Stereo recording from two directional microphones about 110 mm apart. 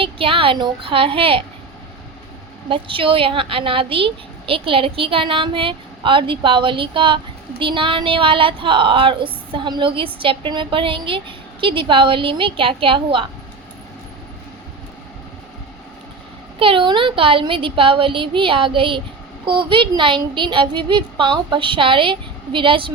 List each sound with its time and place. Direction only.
0.0 s speech: 55° right (ahead or behind)
2.6 s speech: 50° right (ahead or behind)
16.6 s speech: 50° right (ahead or behind)